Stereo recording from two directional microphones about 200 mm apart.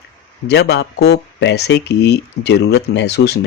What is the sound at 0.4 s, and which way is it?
Speech, 55° left (ahead or behind).